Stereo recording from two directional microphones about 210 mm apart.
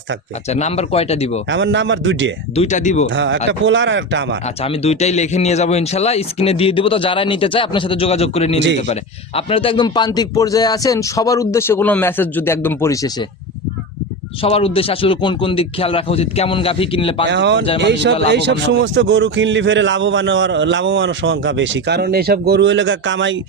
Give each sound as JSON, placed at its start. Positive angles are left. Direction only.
{"t": 0.4, "sound": "speech", "side_deg": 30}
{"t": 1.5, "sound": "a man's voice", "side_deg": -60}
{"t": 2.6, "sound": "speech", "side_deg": 35}
{"t": 3.1, "sound": "a man's voice", "side_deg": -60}
{"t": 4.6, "sound": "a man's voice", "side_deg": 30}
{"t": 14.4, "sound": "speech", "side_deg": 25}
{"t": 17.2, "sound": "a man's voice", "side_deg": -55}